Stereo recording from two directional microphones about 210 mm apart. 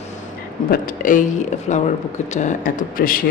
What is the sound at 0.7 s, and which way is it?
Speech, 40° left (ahead or behind).